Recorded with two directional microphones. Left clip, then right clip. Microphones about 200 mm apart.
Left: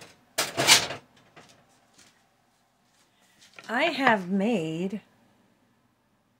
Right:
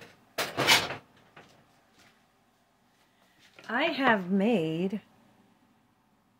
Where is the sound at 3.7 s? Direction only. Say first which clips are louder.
Left 3 dB; 25° left (ahead or behind).